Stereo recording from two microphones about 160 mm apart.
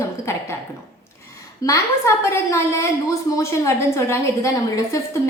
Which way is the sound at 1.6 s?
20° left (ahead or behind).